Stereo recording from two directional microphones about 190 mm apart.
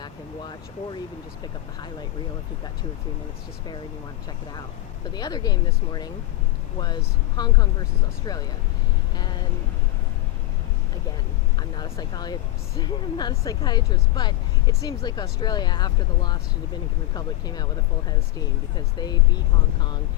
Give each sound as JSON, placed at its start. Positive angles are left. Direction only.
{"t": 0.0, "sound": "speech", "side_deg": 25}
{"t": 5.0, "sound": "speech", "side_deg": 20}
{"t": 11.8, "sound": "speech", "side_deg": 20}
{"t": 18.9, "sound": "speech", "side_deg": 20}